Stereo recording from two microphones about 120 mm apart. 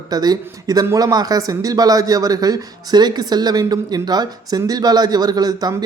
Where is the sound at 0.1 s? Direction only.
35° right (ahead or behind).